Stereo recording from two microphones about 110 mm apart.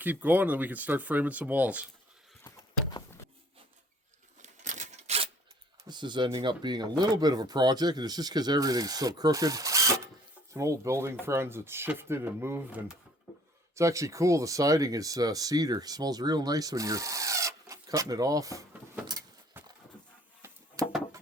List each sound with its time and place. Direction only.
0.0 s speech: 15° right (ahead or behind)
4.4 s coin: 90° right; by 5.3 s 70° right (ahead or behind)
5.9 s speech: 45° right (ahead or behind)
19.6 s horse: 20° right (ahead or behind)
20.4 s a sound: 25° right (ahead or behind)